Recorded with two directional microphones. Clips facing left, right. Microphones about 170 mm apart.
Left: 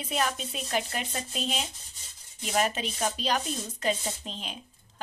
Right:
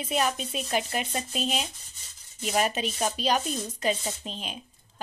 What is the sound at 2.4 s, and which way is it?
A woman's voice, 20° right (ahead or behind).